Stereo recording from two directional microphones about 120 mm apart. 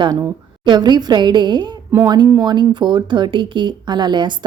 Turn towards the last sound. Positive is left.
turn(degrees=-40)  # may be behind; listen again after turning